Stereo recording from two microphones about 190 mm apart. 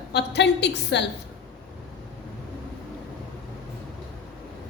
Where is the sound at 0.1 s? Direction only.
65° left (ahead or behind).